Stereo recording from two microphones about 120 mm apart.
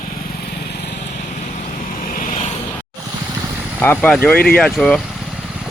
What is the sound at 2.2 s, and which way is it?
Vehicle, 75° left (ahead or behind).